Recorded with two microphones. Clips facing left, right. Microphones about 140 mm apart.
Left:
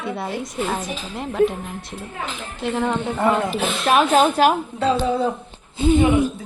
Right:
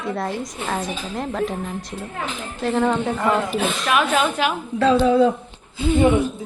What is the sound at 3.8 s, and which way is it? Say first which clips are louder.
Speech: left 5 dB; 30° left (ahead or behind).